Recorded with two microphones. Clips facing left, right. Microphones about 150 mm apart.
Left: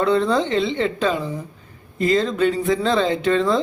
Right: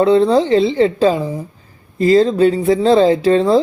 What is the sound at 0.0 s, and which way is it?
Speech, 30° right (ahead or behind).